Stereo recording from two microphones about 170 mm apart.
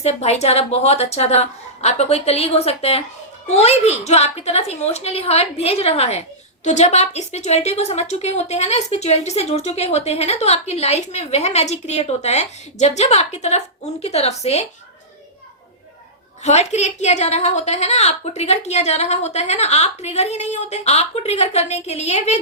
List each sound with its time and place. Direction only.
0.0 s a woman's voice: 40° left (ahead or behind)
16.4 s a woman's voice: 40° left (ahead or behind)